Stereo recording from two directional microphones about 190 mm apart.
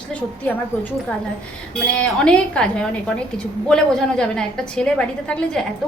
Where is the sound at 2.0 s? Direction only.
5° left (ahead or behind).